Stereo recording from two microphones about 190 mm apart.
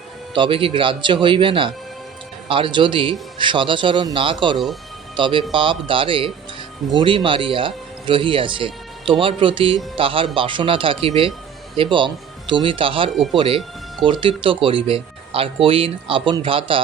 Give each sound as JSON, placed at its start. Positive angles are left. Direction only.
{"t": 0.3, "sound": "a man's voice", "side_deg": -25}
{"t": 4.5, "sound": "speech", "side_deg": 0}
{"t": 5.1, "sound": "a man's voice", "side_deg": -25}